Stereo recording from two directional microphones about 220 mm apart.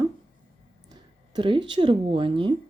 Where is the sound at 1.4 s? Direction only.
20° right (ahead or behind).